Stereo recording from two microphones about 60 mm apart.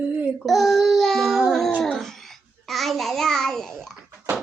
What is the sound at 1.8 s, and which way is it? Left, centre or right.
Babbling, centre.